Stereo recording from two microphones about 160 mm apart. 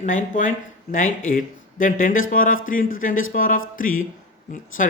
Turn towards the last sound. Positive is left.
turn(degrees=60)  # may be behind; listen again after turning